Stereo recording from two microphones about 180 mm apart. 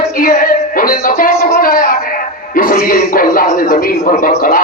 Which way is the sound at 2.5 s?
50° left (ahead or behind).